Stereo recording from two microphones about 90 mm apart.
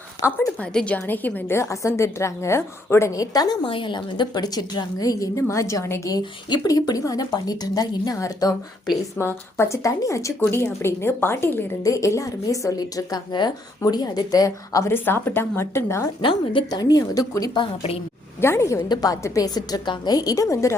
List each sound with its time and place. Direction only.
0.2 s a woman's voice: 25° left (ahead or behind)
0.6 s a woman's voice: 10° left (ahead or behind); by 3.1 s 30° left (ahead or behind)
3.1 s speech: 45° left (ahead or behind)
3.6 s speech: 70° left (ahead or behind); by 6.1 s 35° left (ahead or behind)
6.1 s speech: 45° left (ahead or behind)
9.1 s a woman's voice: 30° left (ahead or behind)
11.8 s a woman's voice: 40° left (ahead or behind)
14.9 s a woman's voice: 25° left (ahead or behind)
16.2 s a woman's voice: 70° left (ahead or behind)
16.6 s speech: 45° left (ahead or behind)
17.5 s a woman's voice: 75° left (ahead or behind)
18.3 s a woman's voice: 30° left (ahead or behind)